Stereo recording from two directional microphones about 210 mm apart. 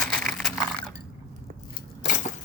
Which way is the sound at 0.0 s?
5° left (ahead or behind).